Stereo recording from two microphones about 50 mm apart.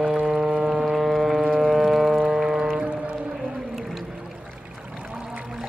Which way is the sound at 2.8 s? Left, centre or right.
Right.